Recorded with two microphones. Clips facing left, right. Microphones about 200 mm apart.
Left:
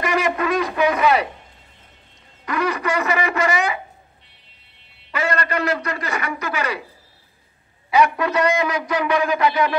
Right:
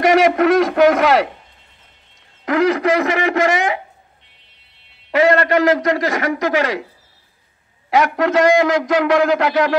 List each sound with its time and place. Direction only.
0.0 s a sound: 90° right
2.4 s a man's voice: 90° right
5.1 s a man's voice: 90° right
7.9 s a man's voice: 90° right